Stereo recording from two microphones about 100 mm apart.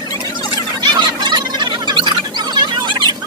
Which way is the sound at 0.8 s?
45° right (ahead or behind).